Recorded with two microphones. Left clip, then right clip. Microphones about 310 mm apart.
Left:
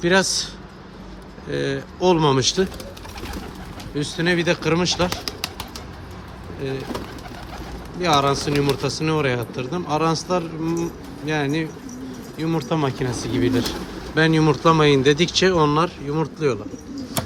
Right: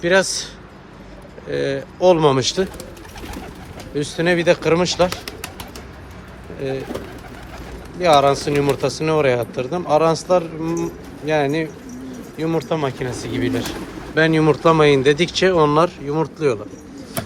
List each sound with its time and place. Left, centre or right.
0.0 s speech: centre
3.9 s speech: centre
5.0 s bird: left
6.6 s speech: centre
7.9 s speech: centre